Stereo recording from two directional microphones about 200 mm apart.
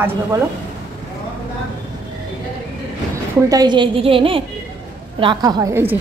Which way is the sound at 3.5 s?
20° right (ahead or behind).